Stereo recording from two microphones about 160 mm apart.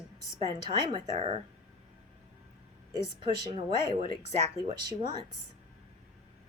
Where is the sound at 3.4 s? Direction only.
35° right (ahead or behind).